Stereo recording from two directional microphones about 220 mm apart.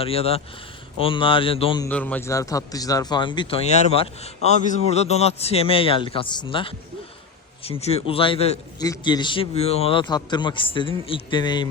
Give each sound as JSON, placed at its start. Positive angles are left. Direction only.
{"t": 0.0, "sound": "a man's voice", "side_deg": 25}
{"t": 1.9, "sound": "a man's voice", "side_deg": 5}